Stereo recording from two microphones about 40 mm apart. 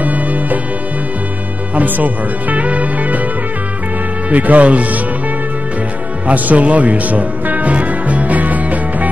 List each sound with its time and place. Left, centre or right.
0.0 s music: right
1.8 s speech: right
4.3 s speech: right
6.2 s music: right